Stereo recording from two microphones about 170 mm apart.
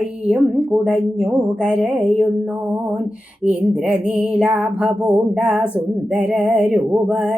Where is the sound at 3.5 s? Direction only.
5° right (ahead or behind).